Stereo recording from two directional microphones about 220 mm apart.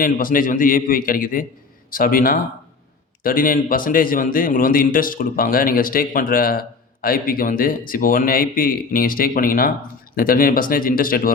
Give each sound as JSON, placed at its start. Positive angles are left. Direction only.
{"t": 0.0, "sound": "a man's voice", "side_deg": 40}